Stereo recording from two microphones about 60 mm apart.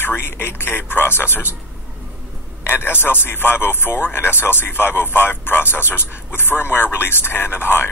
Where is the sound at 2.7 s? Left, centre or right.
Left.